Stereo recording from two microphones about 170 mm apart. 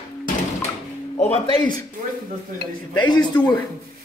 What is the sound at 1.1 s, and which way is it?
Speech, 35° left (ahead or behind).